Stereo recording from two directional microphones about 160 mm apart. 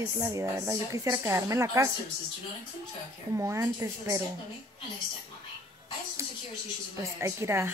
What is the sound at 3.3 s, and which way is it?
Speech, 20° right (ahead or behind).